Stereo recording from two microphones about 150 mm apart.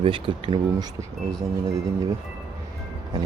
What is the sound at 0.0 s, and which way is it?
Speech, 35° right (ahead or behind).